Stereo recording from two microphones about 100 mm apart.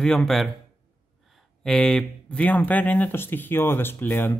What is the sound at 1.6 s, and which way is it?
Speech, 5° left (ahead or behind).